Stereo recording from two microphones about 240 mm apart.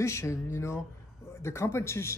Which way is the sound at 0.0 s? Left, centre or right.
Centre.